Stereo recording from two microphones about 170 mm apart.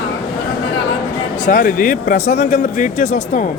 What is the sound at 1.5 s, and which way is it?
Speech, 55° left (ahead or behind).